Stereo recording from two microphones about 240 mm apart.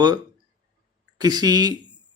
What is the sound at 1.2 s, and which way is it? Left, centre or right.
Mantra, centre.